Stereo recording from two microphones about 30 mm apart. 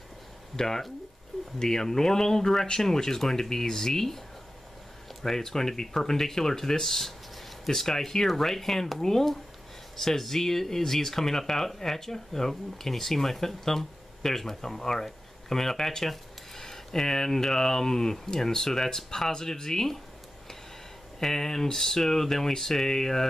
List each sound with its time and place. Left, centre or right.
0.6 s speech: centre
5.2 s speech: centre
21.2 s speech: centre